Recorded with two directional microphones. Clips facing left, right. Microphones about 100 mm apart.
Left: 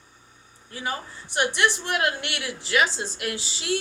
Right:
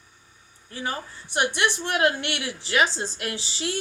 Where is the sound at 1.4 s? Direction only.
30° right (ahead or behind).